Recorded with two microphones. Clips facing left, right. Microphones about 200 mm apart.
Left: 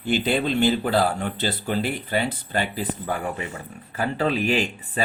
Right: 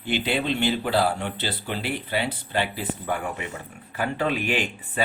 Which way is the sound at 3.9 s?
40° left (ahead or behind).